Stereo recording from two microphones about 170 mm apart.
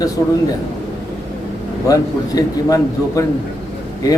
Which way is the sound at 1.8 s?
20° left (ahead or behind).